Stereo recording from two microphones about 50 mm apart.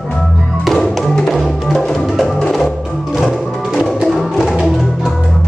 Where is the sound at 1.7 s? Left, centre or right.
Centre.